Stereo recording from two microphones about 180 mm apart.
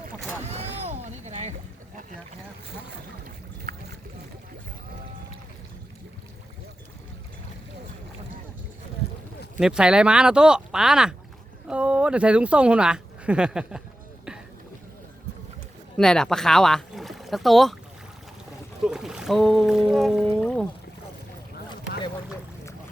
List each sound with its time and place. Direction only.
0.4 s a sound: 35° right (ahead or behind)
3.7 s boat: 60° right (ahead or behind)
9.6 s speech: 5° right (ahead or behind)
14.3 s a sound: 5° right (ahead or behind)
16.0 s speech: 5° left (ahead or behind)
18.9 s speech: 5° right (ahead or behind)